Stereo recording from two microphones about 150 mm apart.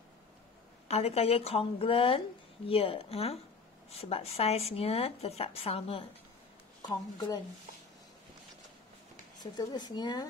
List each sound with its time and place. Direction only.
0.8 s a woman's voice: 45° left (ahead or behind)
6.8 s a woman's voice: 25° left (ahead or behind)
9.4 s speech: 30° left (ahead or behind)